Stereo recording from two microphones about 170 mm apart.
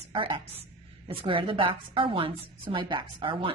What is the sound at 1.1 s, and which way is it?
A woman's voice, 30° right (ahead or behind).